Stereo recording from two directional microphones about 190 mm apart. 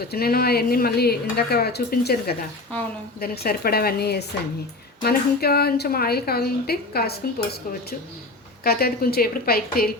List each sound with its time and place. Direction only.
0.1 s speech: 55° left (ahead or behind)
8.6 s a woman's voice: 55° left (ahead or behind)